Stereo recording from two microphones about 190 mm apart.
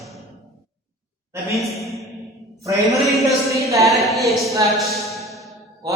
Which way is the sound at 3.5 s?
15° right (ahead or behind).